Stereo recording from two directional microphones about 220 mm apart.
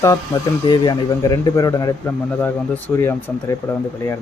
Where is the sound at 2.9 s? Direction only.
10° left (ahead or behind).